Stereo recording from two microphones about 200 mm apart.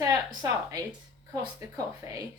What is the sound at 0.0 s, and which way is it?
Speech, 20° right (ahead or behind).